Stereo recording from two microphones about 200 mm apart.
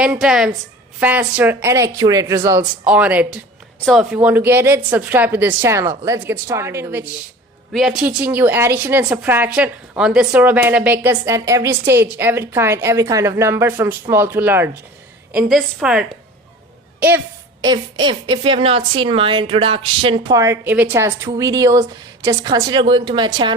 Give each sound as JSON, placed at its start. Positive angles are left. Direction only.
{"t": 0.0, "sound": "a woman's voice", "side_deg": -5}
{"t": 7.7, "sound": "a woman's voice", "side_deg": 0}
{"t": 17.6, "sound": "a woman's voice", "side_deg": -20}